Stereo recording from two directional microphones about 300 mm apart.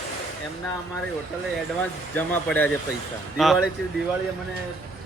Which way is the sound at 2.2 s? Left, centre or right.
Centre.